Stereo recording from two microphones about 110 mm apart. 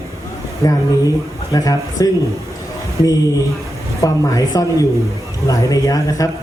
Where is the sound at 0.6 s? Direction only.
35° left (ahead or behind).